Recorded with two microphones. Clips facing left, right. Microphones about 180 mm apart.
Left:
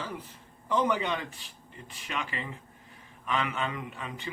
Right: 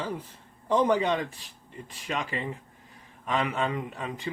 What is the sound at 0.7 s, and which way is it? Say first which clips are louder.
Speech: right 4 dB; 35° right (ahead or behind).